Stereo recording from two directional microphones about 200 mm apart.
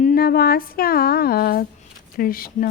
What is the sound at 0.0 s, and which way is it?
Mantra, 50° left (ahead or behind).